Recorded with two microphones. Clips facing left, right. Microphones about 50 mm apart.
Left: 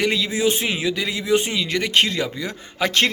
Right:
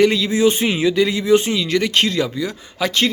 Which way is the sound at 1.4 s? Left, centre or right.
Centre.